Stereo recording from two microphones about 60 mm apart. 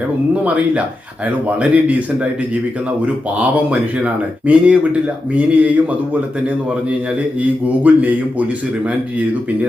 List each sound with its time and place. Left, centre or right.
0.4 s speech: right
3.3 s speech: right
7.3 s speech: right